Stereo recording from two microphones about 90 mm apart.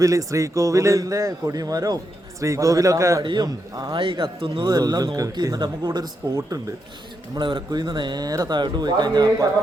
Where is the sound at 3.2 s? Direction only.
50° right (ahead or behind).